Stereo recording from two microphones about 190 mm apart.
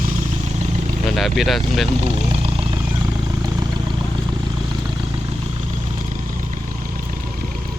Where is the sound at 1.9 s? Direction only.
30° right (ahead or behind).